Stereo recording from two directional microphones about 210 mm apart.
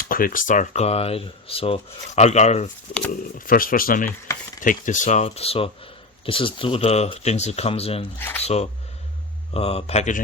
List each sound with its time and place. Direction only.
0.1 s speech: 40° left (ahead or behind)
4.3 s chopping: 15° left (ahead or behind)
4.6 s speech: 40° left (ahead or behind)
9.5 s speech: 30° left (ahead or behind)